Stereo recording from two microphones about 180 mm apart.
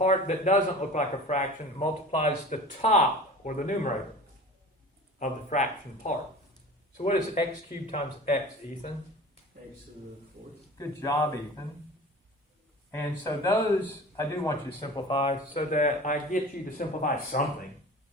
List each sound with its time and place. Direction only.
0.0 s a man's voice: 40° left (ahead or behind)
5.2 s a man's voice: 45° left (ahead or behind)
12.9 s a man's voice: 15° left (ahead or behind); by 17.4 s 45° left (ahead or behind)